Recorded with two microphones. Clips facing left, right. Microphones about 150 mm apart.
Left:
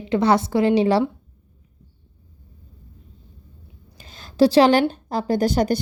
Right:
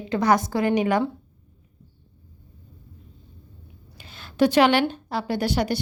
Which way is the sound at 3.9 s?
40° left (ahead or behind).